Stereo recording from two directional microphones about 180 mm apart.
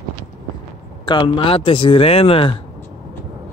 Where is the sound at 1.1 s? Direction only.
25° left (ahead or behind).